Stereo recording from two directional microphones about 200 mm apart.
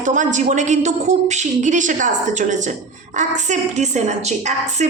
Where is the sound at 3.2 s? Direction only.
35° right (ahead or behind).